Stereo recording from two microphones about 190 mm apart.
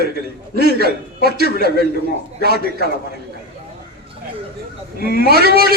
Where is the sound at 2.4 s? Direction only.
55° right (ahead or behind).